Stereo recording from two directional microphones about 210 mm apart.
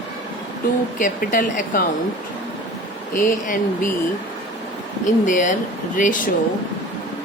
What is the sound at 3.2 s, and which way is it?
Speech, 40° left (ahead or behind).